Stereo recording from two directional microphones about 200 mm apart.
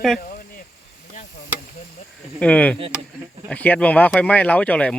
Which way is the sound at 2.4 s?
5° left (ahead or behind).